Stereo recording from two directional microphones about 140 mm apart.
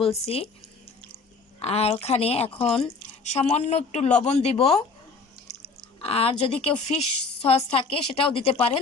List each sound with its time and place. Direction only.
0.1 s a woman's voice: 45° left (ahead or behind)
1.5 s a woman's voice: 45° left (ahead or behind)
5.6 s a sound: 45° left (ahead or behind)
6.6 s a woman's voice: 45° left (ahead or behind)